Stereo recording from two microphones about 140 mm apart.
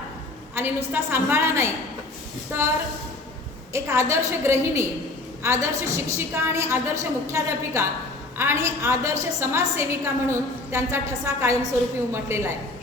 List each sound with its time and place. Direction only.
0.5 s a woman's voice: 15° right (ahead or behind)